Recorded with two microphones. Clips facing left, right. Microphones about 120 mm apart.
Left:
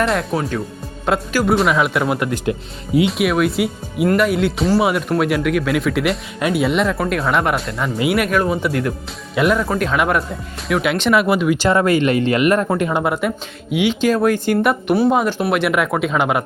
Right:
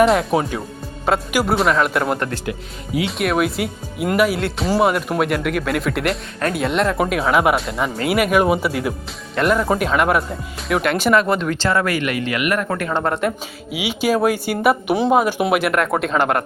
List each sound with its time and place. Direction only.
0.0 s speech: 5° right (ahead or behind)
2.5 s speech: 30° left (ahead or behind)
3.1 s speech: centre (ahead or behind); by 12.6 s 30° left (ahead or behind)
12.6 s speech: 20° left (ahead or behind)
13.0 s speech: 5° left (ahead or behind)